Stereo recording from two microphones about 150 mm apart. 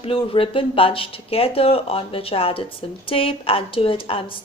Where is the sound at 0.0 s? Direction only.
40° left (ahead or behind).